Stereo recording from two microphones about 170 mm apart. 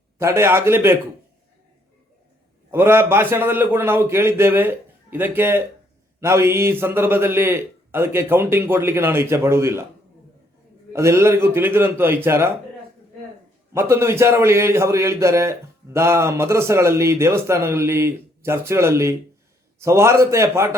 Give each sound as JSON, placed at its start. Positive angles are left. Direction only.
{"t": 0.2, "sound": "a man's voice", "side_deg": -15}
{"t": 2.7, "sound": "a man's voice", "side_deg": -15}
{"t": 10.9, "sound": "a man's voice", "side_deg": -15}
{"t": 13.7, "sound": "a man's voice", "side_deg": -15}